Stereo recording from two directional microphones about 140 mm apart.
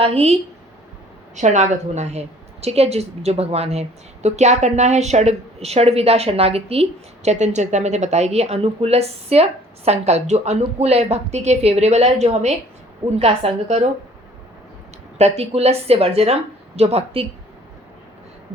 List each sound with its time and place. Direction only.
0.0 s a woman's voice: 45° right (ahead or behind)
1.4 s a woman's voice: 55° right (ahead or behind)
15.2 s a woman's voice: 50° right (ahead or behind)